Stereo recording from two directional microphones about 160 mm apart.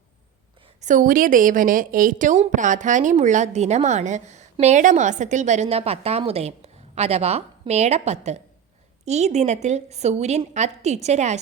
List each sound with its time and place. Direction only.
0.8 s a woman's voice: 55° right (ahead or behind)